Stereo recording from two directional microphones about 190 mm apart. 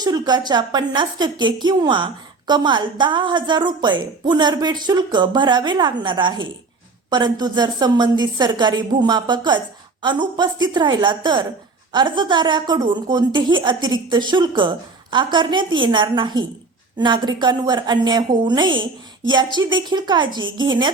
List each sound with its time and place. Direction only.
0.0 s a woman's voice: 20° right (ahead or behind)